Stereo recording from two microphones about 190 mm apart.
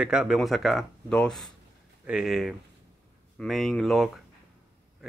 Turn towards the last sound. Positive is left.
turn(degrees=0)  # may be behind; listen again after turning